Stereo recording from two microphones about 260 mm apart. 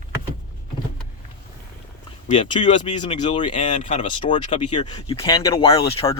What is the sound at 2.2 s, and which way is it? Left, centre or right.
Speech, centre.